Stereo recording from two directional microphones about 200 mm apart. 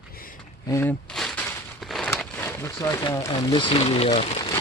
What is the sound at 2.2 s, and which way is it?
Speech, 10° left (ahead or behind).